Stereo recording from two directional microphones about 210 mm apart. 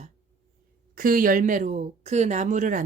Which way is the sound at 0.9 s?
40° right (ahead or behind).